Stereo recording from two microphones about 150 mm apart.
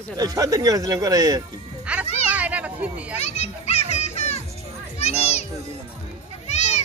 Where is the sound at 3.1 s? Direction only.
45° left (ahead or behind).